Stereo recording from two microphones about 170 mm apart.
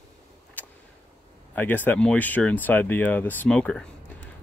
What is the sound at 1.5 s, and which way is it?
Speech, 10° left (ahead or behind).